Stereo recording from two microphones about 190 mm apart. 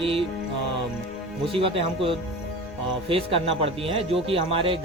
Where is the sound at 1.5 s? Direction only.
30° right (ahead or behind).